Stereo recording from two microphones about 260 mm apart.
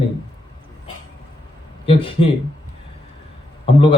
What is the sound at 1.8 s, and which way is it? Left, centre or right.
Speech, left.